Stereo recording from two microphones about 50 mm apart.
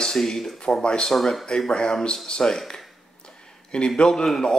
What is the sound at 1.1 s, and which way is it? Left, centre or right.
Speech, centre.